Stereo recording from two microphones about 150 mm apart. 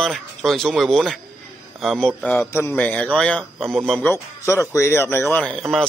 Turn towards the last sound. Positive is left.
turn(degrees=0)  # may be behind; listen again after turning